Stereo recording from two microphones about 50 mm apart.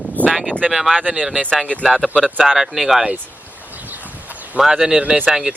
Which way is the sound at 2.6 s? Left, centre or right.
Centre.